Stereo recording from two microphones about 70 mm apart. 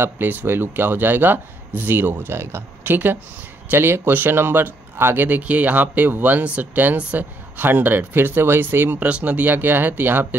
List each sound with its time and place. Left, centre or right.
0.0 s speech: right
2.8 s speech: right